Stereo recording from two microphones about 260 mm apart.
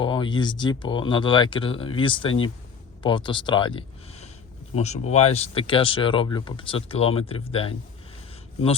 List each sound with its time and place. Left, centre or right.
0.0 s speech: centre